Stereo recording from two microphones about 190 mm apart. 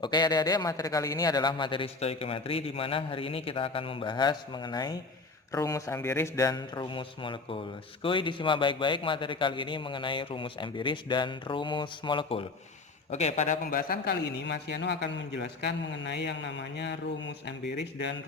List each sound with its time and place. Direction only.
0.0 s speech: 20° left (ahead or behind)
13.1 s a man's voice: 35° left (ahead or behind); by 18.1 s 60° left (ahead or behind)